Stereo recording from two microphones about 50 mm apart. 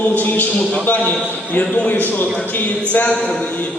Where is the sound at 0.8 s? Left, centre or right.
Left.